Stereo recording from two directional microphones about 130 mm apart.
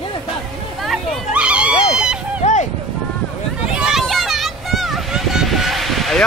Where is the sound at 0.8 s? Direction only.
10° right (ahead or behind).